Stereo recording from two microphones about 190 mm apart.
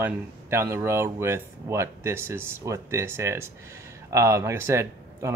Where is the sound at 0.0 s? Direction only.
10° right (ahead or behind).